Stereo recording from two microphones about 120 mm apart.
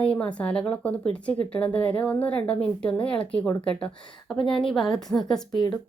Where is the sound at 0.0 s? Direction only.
10° left (ahead or behind).